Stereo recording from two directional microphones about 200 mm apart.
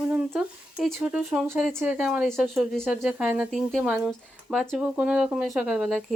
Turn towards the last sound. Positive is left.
turn(degrees=0)  # may be behind; listen again after turning